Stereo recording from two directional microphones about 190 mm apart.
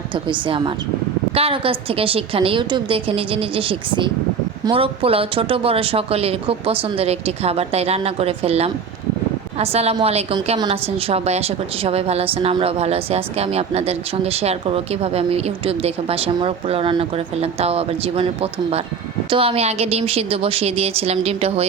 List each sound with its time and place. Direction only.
0.3 s a woman's voice: 25° right (ahead or behind)
19.3 s a woman's voice: 30° right (ahead or behind)